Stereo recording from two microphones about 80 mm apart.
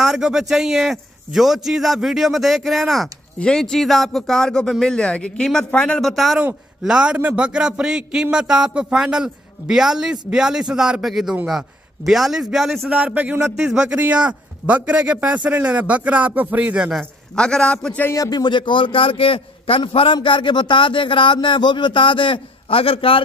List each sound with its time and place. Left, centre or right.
0.0 s a man's voice: centre
3.3 s a man's voice: centre
12.9 s a man's voice: centre
17.4 s speech: centre
18.1 s speech: left
19.7 s a man's voice: left